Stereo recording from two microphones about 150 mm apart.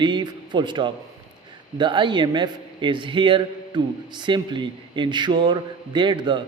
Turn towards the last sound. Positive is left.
turn(degrees=-30)  # may be behind; listen again after turning